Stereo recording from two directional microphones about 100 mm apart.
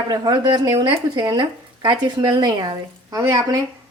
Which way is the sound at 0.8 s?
50° right (ahead or behind).